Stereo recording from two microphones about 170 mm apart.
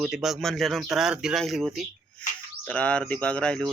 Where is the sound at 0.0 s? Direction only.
5° right (ahead or behind).